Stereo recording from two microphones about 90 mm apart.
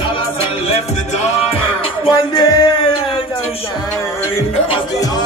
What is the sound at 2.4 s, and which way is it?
Music, 50° left (ahead or behind).